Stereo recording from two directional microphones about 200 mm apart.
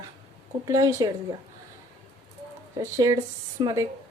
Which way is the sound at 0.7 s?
15° right (ahead or behind).